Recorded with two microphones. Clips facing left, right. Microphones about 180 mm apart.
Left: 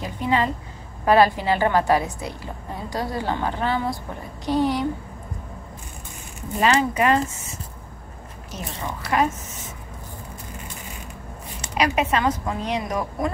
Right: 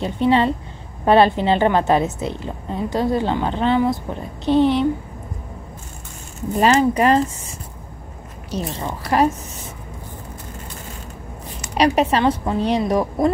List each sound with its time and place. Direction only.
0.0 s a woman's voice: 30° right (ahead or behind)
6.6 s speech: 35° right (ahead or behind)
8.5 s speech: 35° right (ahead or behind)
11.7 s speech: 35° right (ahead or behind)